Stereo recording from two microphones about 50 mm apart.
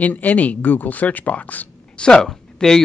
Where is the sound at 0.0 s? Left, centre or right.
Left.